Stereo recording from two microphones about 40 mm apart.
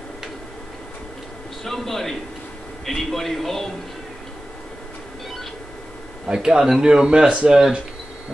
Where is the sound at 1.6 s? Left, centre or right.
Centre.